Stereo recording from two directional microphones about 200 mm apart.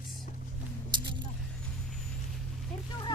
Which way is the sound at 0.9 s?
20° right (ahead or behind).